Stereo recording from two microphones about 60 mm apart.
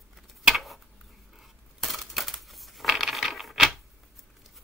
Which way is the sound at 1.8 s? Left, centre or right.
Centre.